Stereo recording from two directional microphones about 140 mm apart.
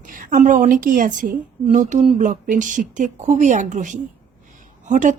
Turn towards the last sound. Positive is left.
turn(degrees=-65)  # may be behind; listen again after turning